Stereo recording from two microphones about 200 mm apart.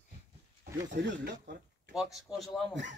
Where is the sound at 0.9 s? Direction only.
55° right (ahead or behind).